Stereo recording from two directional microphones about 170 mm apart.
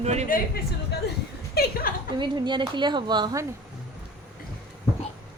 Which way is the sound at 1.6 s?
65° left (ahead or behind).